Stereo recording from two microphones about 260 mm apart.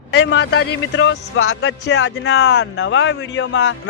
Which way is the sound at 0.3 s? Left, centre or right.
Left.